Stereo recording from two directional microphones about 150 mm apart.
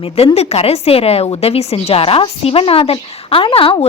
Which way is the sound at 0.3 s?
45° left (ahead or behind).